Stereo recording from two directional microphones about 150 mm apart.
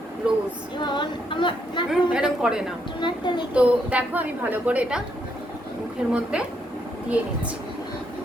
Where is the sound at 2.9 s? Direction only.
30° left (ahead or behind).